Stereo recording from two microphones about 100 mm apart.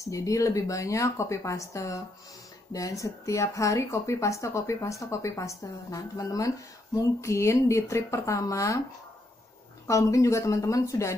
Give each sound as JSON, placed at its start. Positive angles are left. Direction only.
{"t": 0.0, "sound": "speech", "side_deg": 35}
{"t": 9.8, "sound": "speech", "side_deg": 30}